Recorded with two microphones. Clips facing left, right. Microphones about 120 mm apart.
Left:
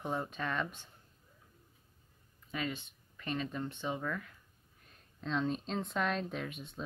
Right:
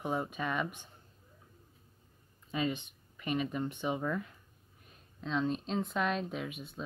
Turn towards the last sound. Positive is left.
turn(degrees=-5)  # may be behind; listen again after turning